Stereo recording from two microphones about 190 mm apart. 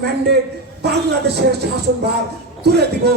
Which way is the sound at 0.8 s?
60° right (ahead or behind).